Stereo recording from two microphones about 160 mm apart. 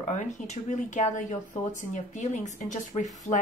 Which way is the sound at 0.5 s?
50° left (ahead or behind).